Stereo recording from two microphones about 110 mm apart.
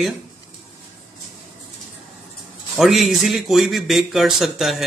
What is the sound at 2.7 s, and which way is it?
Speech, centre (ahead or behind).